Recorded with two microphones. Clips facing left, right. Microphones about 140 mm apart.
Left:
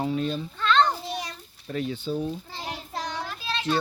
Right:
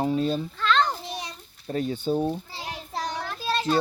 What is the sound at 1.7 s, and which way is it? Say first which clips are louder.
Speech: right 3 dB; 40° right (ahead or behind).